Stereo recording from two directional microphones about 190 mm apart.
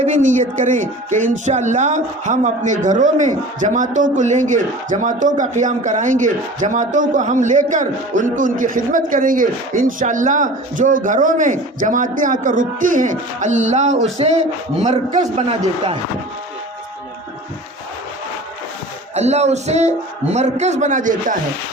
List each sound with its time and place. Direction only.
0.0 s speech: 40° right (ahead or behind)
19.1 s speech: 35° right (ahead or behind)